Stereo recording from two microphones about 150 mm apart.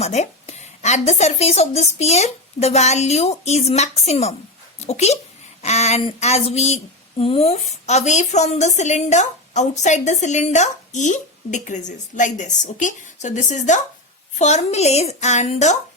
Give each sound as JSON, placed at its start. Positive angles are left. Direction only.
{"t": 0.0, "sound": "a woman's voice", "side_deg": 45}